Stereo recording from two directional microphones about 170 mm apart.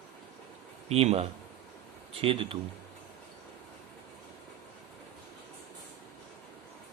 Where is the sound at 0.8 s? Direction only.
35° right (ahead or behind).